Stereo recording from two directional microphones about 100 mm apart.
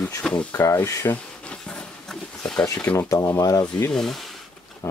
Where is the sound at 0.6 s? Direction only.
30° left (ahead or behind).